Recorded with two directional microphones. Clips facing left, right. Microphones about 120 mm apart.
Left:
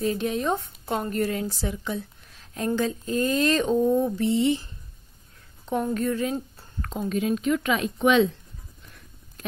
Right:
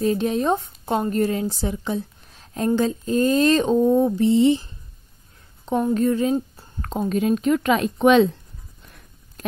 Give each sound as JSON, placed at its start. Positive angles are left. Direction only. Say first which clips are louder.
{"t": 0.0, "sound": "speech", "louder": "right 5 dB", "side_deg": -35}
{"t": 5.7, "sound": "speech", "louder": "right 5 dB", "side_deg": -25}